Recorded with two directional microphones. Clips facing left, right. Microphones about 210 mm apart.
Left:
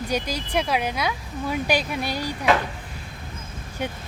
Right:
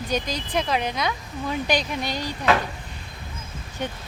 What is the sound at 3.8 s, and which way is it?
Speech, 10° left (ahead or behind).